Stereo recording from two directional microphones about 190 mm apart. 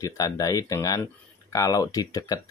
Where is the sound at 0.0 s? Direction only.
20° left (ahead or behind).